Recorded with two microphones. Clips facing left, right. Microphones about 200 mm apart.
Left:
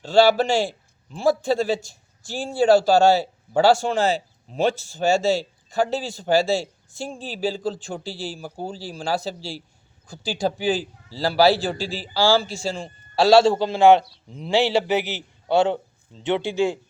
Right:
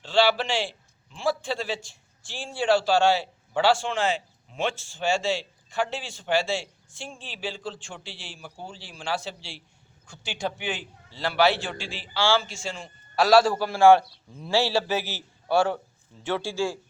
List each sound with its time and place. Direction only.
0.0 s a man's voice: 40° left (ahead or behind); by 16.8 s 20° left (ahead or behind)